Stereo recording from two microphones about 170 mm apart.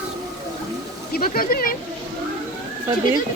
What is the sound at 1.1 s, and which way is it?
Speech, 60° left (ahead or behind).